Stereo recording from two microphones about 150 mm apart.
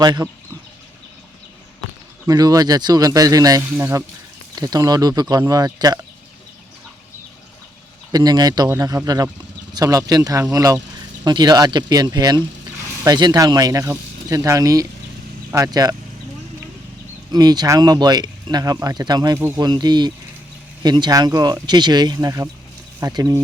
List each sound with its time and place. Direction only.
0.0 s speech: 25° right (ahead or behind)
2.2 s speech: 25° right (ahead or behind)
3.7 s speech: 10° right (ahead or behind)
4.5 s speech: 25° right (ahead or behind)
8.1 s speech: 25° right (ahead or behind)
17.3 s speech: 25° right (ahead or behind)